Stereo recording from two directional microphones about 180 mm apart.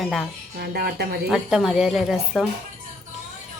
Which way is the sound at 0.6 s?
60° right (ahead or behind).